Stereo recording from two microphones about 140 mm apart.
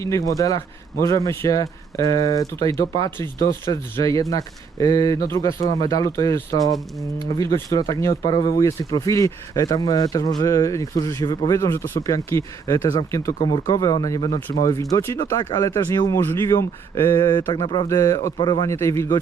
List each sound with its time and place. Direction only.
0.0 s speech: 25° left (ahead or behind)
13.4 s speech: 30° left (ahead or behind)
17.8 s speech: 20° left (ahead or behind)
18.3 s speech: 35° left (ahead or behind)